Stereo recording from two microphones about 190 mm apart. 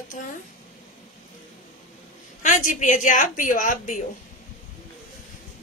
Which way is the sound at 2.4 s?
40° left (ahead or behind).